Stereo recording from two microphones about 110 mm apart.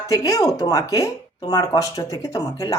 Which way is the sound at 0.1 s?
30° left (ahead or behind).